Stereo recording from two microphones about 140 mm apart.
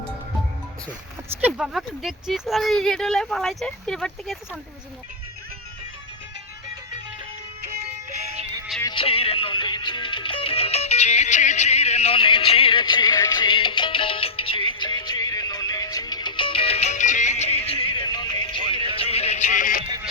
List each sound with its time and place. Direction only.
1.3 s speech: 10° right (ahead or behind)
9.0 s music: 40° left (ahead or behind)
18.0 s music: 30° left (ahead or behind)
18.9 s music: 45° left (ahead or behind); by 19.8 s 70° left (ahead or behind)